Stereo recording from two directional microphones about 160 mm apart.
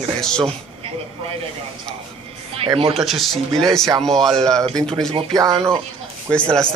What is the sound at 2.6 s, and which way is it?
Speech, 35° right (ahead or behind).